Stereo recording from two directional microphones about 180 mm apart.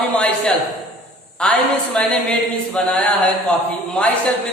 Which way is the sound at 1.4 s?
5° left (ahead or behind).